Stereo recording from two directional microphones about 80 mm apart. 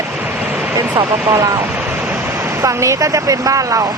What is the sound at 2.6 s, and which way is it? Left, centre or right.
Speech, right.